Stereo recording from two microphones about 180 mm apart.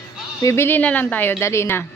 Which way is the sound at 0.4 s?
15° left (ahead or behind).